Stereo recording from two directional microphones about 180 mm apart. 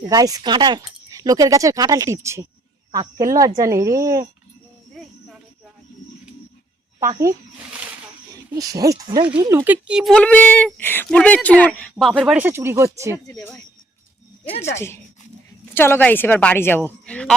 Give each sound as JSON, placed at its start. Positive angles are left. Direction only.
{"t": 0.1, "sound": "speech", "side_deg": -20}
{"t": 8.5, "sound": "speech", "side_deg": -20}
{"t": 13.2, "sound": "a woman's voice", "side_deg": 20}
{"t": 14.8, "sound": "a woman's voice", "side_deg": 15}